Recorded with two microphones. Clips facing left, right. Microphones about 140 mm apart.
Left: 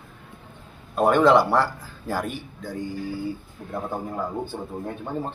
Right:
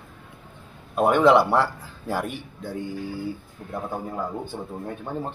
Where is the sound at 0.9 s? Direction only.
15° right (ahead or behind).